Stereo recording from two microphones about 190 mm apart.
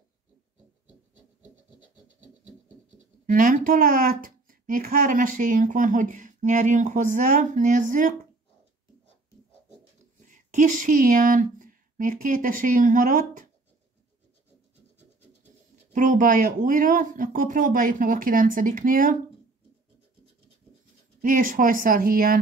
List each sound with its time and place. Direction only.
3.3 s speech: 45° right (ahead or behind)
10.2 s speech: 40° right (ahead or behind)
15.9 s speech: 45° right (ahead or behind)
21.2 s speech: 45° right (ahead or behind)